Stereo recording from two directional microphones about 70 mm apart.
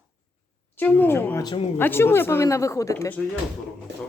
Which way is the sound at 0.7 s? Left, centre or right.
Left.